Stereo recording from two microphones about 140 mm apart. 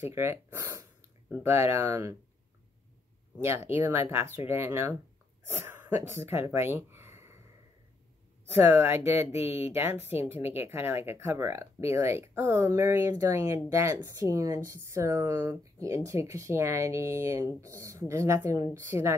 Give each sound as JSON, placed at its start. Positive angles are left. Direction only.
{"t": 0.0, "sound": "speech", "side_deg": -20}
{"t": 3.3, "sound": "speech", "side_deg": -20}
{"t": 8.5, "sound": "speech", "side_deg": -15}